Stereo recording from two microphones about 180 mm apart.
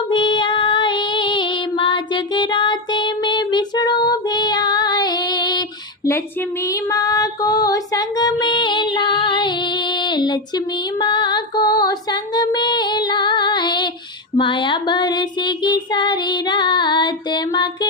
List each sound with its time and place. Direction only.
0.1 s female singing: 25° left (ahead or behind)
6.7 s music: 20° left (ahead or behind)
11.0 s female singing: 25° left (ahead or behind)
14.3 s child singing: 25° left (ahead or behind)